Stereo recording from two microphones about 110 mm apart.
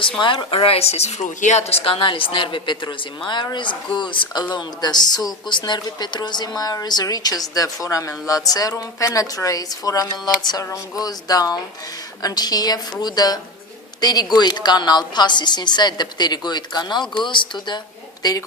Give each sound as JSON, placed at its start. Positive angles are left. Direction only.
{"t": 0.2, "sound": "speech", "side_deg": 45}
{"t": 18.2, "sound": "a woman's voice", "side_deg": 35}